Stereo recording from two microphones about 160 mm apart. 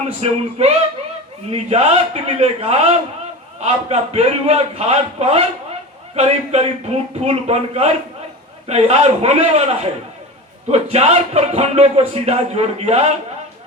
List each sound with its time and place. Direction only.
0.2 s a man's voice: 40° right (ahead or behind)